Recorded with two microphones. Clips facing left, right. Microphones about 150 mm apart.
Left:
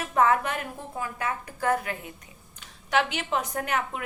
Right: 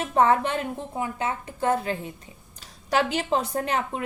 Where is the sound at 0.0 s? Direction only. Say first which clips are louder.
Right 2 dB; 30° right (ahead or behind).